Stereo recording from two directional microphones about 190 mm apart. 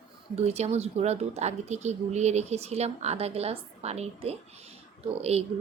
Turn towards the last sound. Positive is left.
turn(degrees=-30)  # may be behind; listen again after turning